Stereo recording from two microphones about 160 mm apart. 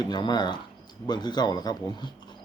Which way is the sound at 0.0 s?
25° left (ahead or behind).